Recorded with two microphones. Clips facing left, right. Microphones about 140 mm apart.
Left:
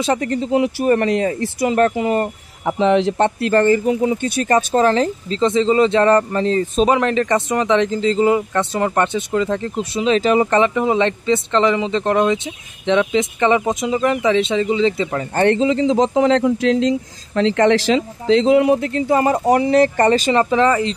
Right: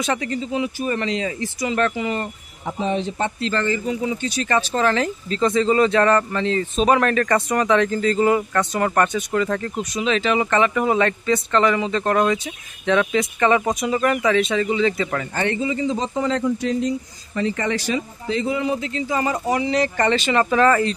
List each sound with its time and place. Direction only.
0.2 s a man's voice: 60° left (ahead or behind)
2.6 s a man's voice: 90° left; by 4.6 s 50° left (ahead or behind)
4.7 s speech: 35° left (ahead or behind)
6.9 s speech: 20° left (ahead or behind)
15.3 s speech: 60° left (ahead or behind); by 20.4 s 35° left (ahead or behind)
20.4 s speech: 20° left (ahead or behind)